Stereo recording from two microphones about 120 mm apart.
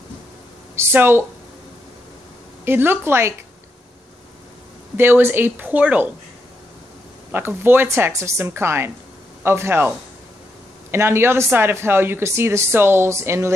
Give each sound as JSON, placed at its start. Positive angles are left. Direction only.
{"t": 0.7, "sound": "a woman's voice", "side_deg": -20}
{"t": 2.6, "sound": "speech", "side_deg": -20}
{"t": 4.9, "sound": "speech", "side_deg": -20}
{"t": 7.2, "sound": "speech", "side_deg": -20}